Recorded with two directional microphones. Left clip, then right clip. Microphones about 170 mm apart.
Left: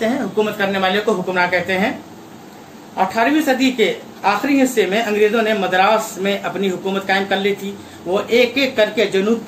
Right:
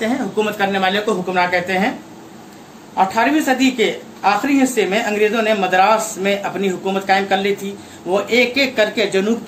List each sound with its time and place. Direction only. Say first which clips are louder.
0.0 s speech: left 1 dB; 20° right (ahead or behind)
3.0 s speech: right 1 dB; 25° right (ahead or behind)